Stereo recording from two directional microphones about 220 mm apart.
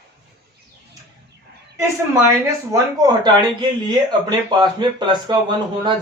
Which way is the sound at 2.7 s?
15° right (ahead or behind).